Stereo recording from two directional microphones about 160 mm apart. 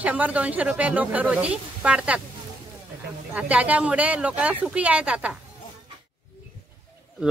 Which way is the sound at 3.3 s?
10° right (ahead or behind).